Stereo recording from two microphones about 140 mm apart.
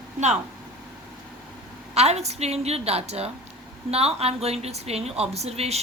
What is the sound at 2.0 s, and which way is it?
A woman's voice, 50° right (ahead or behind).